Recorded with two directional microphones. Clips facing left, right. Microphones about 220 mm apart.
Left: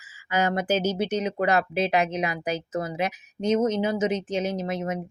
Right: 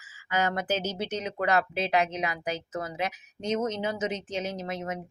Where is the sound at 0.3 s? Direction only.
10° left (ahead or behind).